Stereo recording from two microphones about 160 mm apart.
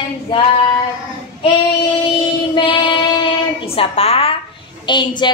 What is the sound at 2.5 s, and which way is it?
Child singing, 30° left (ahead or behind).